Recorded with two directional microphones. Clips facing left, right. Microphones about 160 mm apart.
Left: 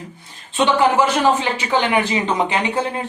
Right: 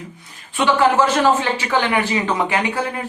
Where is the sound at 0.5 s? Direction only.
20° left (ahead or behind).